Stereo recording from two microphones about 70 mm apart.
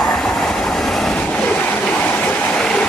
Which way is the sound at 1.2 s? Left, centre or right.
Centre.